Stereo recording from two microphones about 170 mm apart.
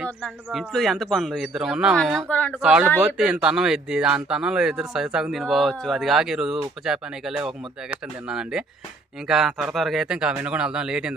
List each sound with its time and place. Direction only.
0.0 s speech: centre (ahead or behind)
2.6 s speech: 5° right (ahead or behind)